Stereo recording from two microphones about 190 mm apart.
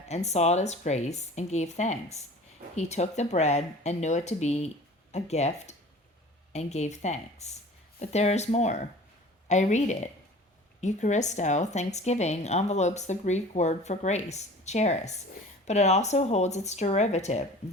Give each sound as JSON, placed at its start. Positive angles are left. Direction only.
{"t": 0.1, "sound": "a woman's voice", "side_deg": 35}